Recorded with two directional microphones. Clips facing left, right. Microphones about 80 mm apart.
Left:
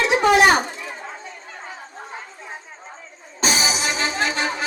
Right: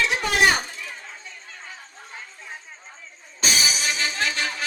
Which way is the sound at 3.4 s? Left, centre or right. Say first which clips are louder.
Left 4 dB; left.